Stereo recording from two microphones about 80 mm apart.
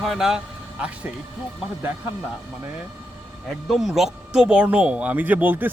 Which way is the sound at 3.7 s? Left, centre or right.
Centre.